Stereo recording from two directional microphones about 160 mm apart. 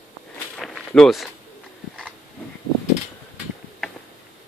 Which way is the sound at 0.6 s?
5° left (ahead or behind).